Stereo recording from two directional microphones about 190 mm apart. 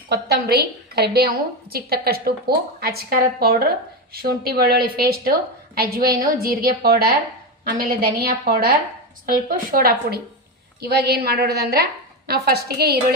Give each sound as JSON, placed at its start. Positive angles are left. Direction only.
{"t": 0.1, "sound": "a woman's voice", "side_deg": -55}
{"t": 10.8, "sound": "a woman's voice", "side_deg": -60}